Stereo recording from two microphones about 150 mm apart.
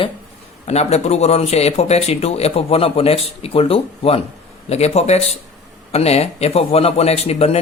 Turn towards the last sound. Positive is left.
turn(degrees=45)  # may be behind; listen again after turning